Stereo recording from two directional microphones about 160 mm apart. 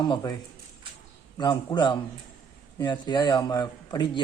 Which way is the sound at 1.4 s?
25° left (ahead or behind).